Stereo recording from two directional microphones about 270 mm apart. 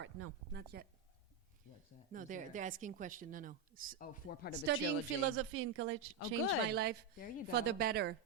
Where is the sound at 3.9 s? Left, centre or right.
Left.